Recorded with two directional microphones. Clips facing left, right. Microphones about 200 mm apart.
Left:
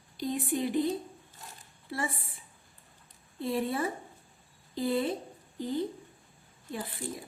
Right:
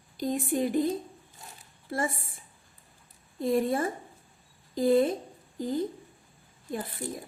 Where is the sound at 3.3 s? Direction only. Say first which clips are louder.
Right 5 dB; 45° right (ahead or behind).